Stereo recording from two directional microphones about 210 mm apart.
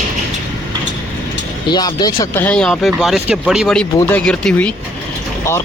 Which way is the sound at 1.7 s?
20° left (ahead or behind).